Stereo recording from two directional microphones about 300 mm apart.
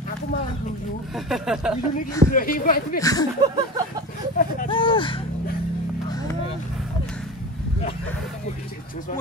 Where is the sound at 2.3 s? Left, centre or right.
Left.